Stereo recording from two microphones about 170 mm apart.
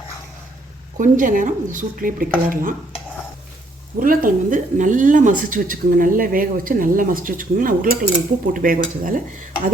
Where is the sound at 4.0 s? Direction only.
55° right (ahead or behind).